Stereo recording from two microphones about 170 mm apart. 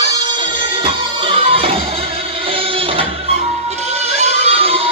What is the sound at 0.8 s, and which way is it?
Music, 35° right (ahead or behind).